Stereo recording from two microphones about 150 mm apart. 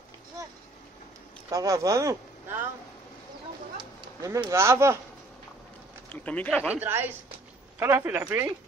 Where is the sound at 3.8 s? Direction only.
20° right (ahead or behind).